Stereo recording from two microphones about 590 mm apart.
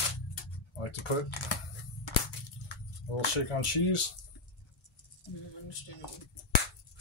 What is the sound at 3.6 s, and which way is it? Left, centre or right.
Speech, left.